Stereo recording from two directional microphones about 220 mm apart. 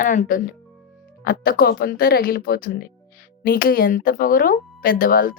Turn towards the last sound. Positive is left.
turn(degrees=40)  # may be behind; listen again after turning